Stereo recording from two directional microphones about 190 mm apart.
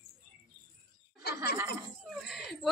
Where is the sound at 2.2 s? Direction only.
Centre (ahead or behind).